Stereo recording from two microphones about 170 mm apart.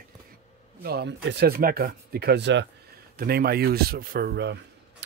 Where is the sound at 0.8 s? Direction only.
75° right (ahead or behind).